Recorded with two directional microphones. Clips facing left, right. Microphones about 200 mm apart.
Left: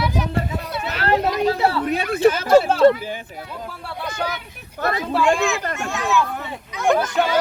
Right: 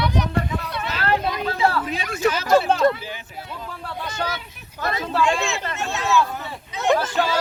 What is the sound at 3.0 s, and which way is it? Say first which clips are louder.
Speech: left 5 dB; 45° left (ahead or behind).